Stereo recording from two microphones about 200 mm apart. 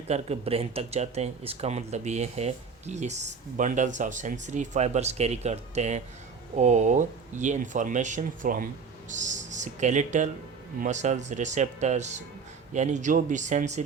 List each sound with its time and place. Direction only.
0.1 s speech: 30° right (ahead or behind)